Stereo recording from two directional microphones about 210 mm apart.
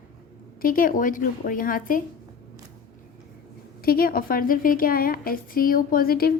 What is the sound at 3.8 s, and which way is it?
A woman's voice, 45° left (ahead or behind).